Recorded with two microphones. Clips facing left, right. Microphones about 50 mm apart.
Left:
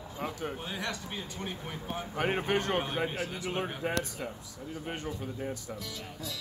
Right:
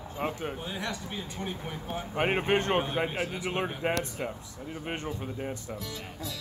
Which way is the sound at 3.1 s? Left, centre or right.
Right.